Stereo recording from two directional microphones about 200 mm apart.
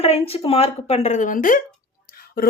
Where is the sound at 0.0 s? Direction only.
30° left (ahead or behind).